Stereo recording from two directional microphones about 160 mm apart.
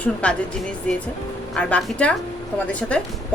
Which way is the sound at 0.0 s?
5° left (ahead or behind).